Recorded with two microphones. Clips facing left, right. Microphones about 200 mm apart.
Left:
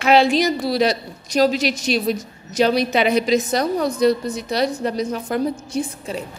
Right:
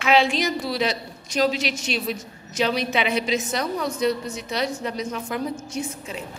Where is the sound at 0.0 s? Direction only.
35° left (ahead or behind).